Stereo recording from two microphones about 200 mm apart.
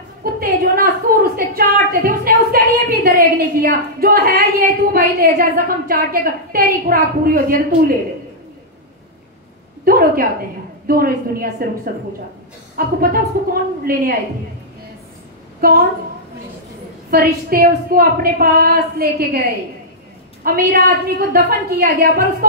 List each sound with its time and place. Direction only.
0.2 s a woman's voice: 45° right (ahead or behind)
9.8 s a woman's voice: 45° right (ahead or behind)
15.6 s a woman's voice: 50° right (ahead or behind)
17.1 s a woman's voice: 50° right (ahead or behind)
20.4 s a woman's voice: 45° right (ahead or behind)